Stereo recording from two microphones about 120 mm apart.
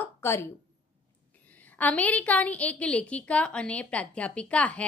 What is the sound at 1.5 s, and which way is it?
A woman's voice, 15° left (ahead or behind).